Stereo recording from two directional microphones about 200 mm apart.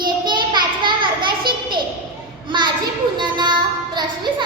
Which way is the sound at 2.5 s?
20° right (ahead or behind).